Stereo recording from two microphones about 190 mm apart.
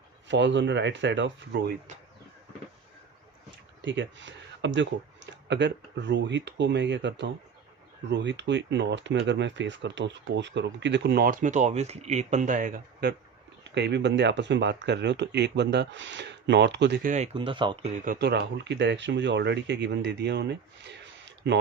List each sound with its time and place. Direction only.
0.3 s speech: 70° right (ahead or behind)
3.8 s speech: 75° right (ahead or behind); by 13.1 s 50° right (ahead or behind)
13.7 s speech: 65° right (ahead or behind)
17.1 s speech: 35° right (ahead or behind)
17.9 s speech: 45° right (ahead or behind); by 21.6 s 70° right (ahead or behind)